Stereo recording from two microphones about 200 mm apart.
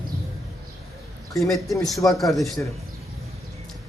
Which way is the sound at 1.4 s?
Centre (ahead or behind).